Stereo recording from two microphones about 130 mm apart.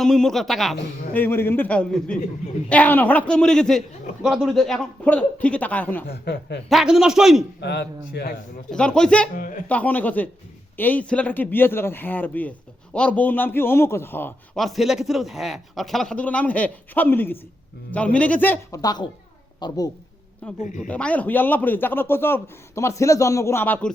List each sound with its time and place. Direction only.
0.0 s a man's voice: 5° left (ahead or behind)
1.1 s a man's voice: 15° left (ahead or behind)
6.7 s a man's voice: centre (ahead or behind)
8.7 s a man's voice: 5° left (ahead or behind)
9.3 s speech: 90° left
9.6 s a man's voice: 10° left (ahead or behind)
14.5 s a man's voice: centre (ahead or behind)
18.8 s a woman's voice: 30° left (ahead or behind)
20.6 s speech: 75° left (ahead or behind)
20.8 s a man's voice: 10° left (ahead or behind)